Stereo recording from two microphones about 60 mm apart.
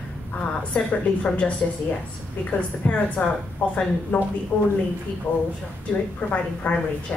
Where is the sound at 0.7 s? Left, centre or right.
Left.